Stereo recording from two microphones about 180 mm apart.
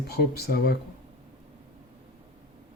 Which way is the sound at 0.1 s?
60° left (ahead or behind).